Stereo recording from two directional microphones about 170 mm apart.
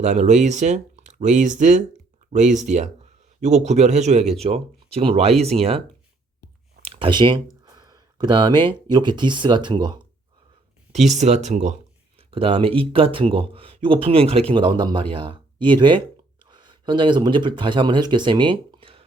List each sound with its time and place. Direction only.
0.0 s speech: 45° right (ahead or behind)
6.8 s speech: 35° right (ahead or behind)
11.1 s speech: 45° right (ahead or behind)
12.3 s speech: 30° right (ahead or behind)